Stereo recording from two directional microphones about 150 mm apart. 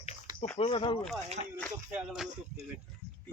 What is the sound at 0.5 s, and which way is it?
Speech, 40° left (ahead or behind).